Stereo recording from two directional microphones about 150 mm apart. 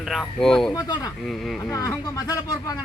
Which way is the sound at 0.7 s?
25° left (ahead or behind).